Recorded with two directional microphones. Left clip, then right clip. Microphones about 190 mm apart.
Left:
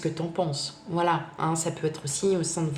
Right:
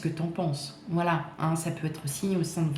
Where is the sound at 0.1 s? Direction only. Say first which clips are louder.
Left 4 dB; 35° left (ahead or behind).